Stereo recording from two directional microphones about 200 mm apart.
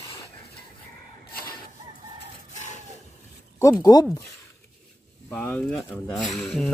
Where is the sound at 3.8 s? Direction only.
20° left (ahead or behind).